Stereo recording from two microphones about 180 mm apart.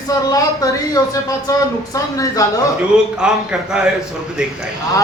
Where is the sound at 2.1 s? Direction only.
20° left (ahead or behind).